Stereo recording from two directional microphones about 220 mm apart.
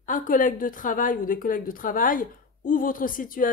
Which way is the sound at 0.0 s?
35° left (ahead or behind).